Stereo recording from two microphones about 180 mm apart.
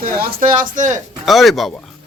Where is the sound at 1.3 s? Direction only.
Centre (ahead or behind).